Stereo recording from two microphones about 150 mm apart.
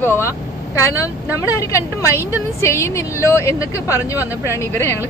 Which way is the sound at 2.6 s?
20° left (ahead or behind).